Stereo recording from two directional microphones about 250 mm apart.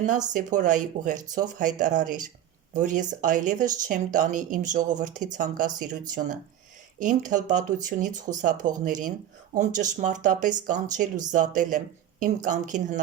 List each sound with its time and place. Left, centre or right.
0.3 s speech: right